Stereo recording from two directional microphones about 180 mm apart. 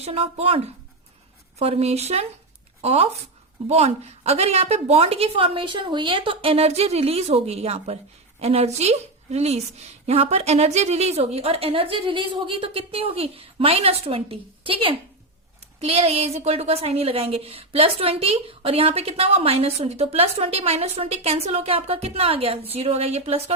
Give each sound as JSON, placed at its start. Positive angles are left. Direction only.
{"t": 0.0, "sound": "a woman's voice", "side_deg": -35}